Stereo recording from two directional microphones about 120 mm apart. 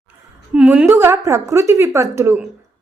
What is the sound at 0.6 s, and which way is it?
Speech, 10° right (ahead or behind).